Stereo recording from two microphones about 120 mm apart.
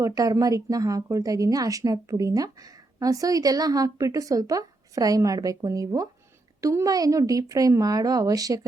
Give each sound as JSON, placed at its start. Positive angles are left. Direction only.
{"t": 0.0, "sound": "a woman's voice", "side_deg": -30}